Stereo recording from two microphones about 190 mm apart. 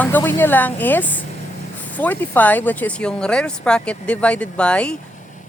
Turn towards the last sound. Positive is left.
turn(degrees=5)  # may be behind; listen again after turning